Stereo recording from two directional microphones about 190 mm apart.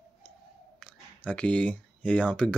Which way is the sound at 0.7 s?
5° left (ahead or behind).